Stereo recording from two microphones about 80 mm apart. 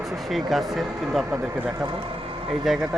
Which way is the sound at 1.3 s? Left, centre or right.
Right.